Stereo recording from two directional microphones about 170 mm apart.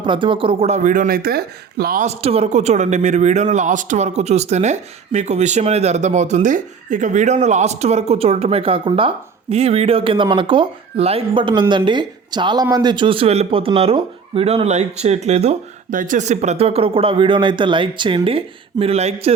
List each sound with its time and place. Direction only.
0.0 s speech: 30° right (ahead or behind); by 2.0 s 60° right (ahead or behind)
2.0 s speech: 35° right (ahead or behind)